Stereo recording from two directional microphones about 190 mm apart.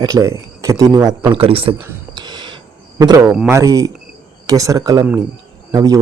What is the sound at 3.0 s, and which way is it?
Speech, 20° right (ahead or behind).